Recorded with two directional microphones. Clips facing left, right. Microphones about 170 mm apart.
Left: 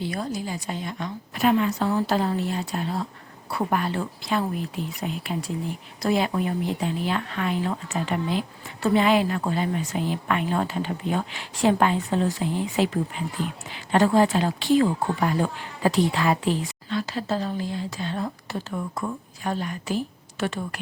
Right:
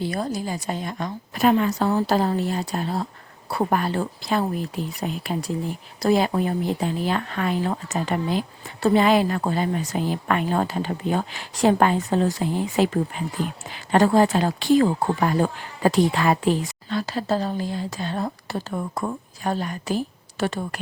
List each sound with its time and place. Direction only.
0.0 s speech: 40° right (ahead or behind)